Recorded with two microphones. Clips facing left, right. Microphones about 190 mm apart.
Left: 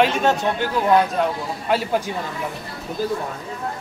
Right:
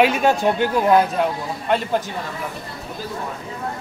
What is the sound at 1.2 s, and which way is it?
Speech, 5° left (ahead or behind).